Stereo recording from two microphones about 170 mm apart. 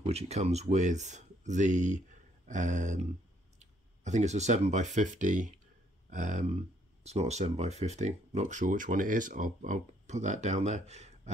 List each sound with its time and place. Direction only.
0.0 s speech: 35° right (ahead or behind)